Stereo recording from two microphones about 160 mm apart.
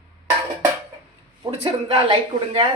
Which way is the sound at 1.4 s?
35° right (ahead or behind).